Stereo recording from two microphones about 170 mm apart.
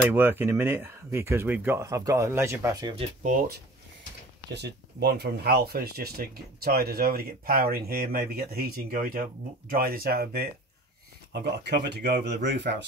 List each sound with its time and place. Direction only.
0.1 s speech: 10° right (ahead or behind)
3.2 s speech: 55° right (ahead or behind)
4.6 s speech: 75° right (ahead or behind)
11.6 s speech: 75° right (ahead or behind)
12.4 s speech: 90° right